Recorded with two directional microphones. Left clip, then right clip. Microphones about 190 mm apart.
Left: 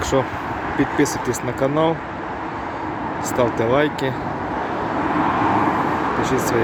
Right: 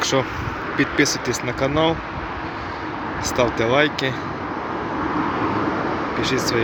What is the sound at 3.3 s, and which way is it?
Speech, 5° left (ahead or behind).